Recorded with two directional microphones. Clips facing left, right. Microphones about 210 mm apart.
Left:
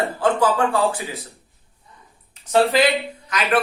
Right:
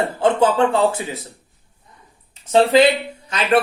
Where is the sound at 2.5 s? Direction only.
25° right (ahead or behind).